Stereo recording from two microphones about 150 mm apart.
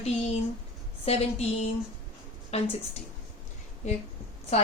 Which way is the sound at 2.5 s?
45° left (ahead or behind).